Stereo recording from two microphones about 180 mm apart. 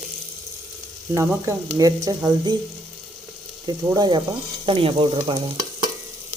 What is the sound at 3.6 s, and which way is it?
Speech, 25° right (ahead or behind).